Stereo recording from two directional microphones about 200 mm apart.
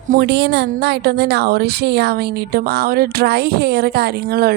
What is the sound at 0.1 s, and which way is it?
A woman's voice, 55° right (ahead or behind).